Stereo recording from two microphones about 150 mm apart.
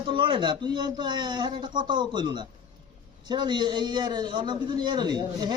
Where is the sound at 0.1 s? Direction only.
35° right (ahead or behind).